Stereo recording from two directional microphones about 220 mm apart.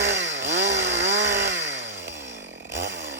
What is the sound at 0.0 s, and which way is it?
Chainsaw, 55° right (ahead or behind).